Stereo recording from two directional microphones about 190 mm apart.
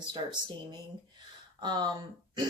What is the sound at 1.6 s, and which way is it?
Speech, 20° right (ahead or behind).